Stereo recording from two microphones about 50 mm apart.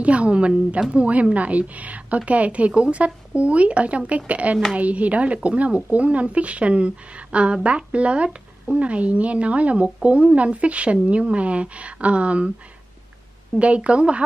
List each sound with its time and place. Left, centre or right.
0.0 s a woman's voice: right
13.6 s a woman's voice: right